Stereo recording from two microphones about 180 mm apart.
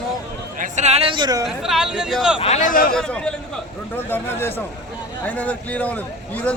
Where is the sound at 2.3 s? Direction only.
35° left (ahead or behind).